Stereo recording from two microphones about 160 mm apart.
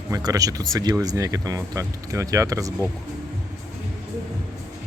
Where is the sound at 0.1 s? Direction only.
25° right (ahead or behind).